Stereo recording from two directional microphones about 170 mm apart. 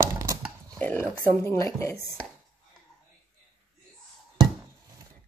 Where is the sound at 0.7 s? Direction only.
10° left (ahead or behind).